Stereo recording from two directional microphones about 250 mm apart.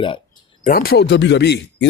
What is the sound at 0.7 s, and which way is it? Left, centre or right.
Speech, left.